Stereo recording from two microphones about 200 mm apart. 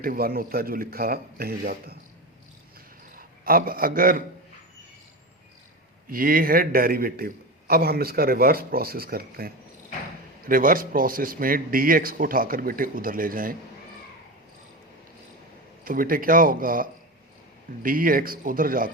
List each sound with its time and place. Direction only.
0.0 s a man's voice: 45° right (ahead or behind)
3.2 s a man's voice: 45° right (ahead or behind)
6.1 s a man's voice: 45° right (ahead or behind)
15.8 s a man's voice: 45° right (ahead or behind)